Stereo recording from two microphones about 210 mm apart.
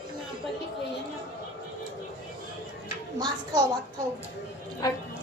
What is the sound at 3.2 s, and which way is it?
Speech, 20° right (ahead or behind).